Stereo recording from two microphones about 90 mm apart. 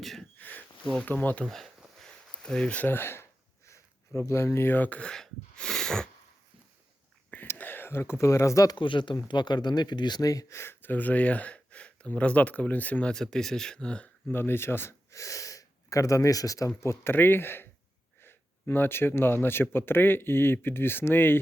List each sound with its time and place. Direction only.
0.0 s speech: 5° left (ahead or behind)
0.3 s sniff: 20° left (ahead or behind)
1.0 s speech: 20° left (ahead or behind)
1.5 s a sound: 5° left (ahead or behind)
2.8 s speech: 25° left (ahead or behind); by 6.1 s 5° left (ahead or behind)
7.5 s speech: 20° left (ahead or behind); by 8.7 s 35° left (ahead or behind)
8.7 s speech: 65° left (ahead or behind)
9.3 s speech: 55° left (ahead or behind); by 21.3 s 25° left (ahead or behind)